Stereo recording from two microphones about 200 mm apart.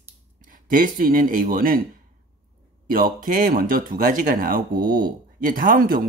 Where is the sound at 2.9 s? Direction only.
45° right (ahead or behind).